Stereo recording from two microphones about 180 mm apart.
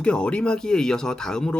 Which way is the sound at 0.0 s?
5° left (ahead or behind).